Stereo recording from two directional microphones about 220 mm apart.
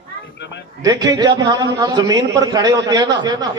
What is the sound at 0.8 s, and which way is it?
A man's voice, 15° right (ahead or behind).